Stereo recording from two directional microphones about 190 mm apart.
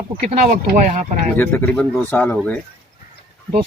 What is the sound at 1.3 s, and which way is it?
Speech, 10° left (ahead or behind).